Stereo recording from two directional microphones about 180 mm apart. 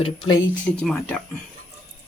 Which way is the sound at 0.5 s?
5° left (ahead or behind).